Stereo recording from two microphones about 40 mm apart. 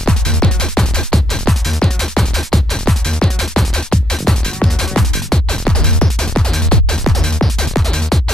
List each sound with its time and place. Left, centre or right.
0.0 s music: centre